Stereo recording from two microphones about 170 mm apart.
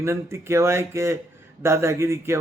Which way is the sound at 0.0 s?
15° right (ahead or behind).